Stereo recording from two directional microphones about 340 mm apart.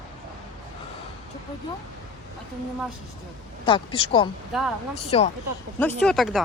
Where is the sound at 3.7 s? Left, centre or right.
Centre.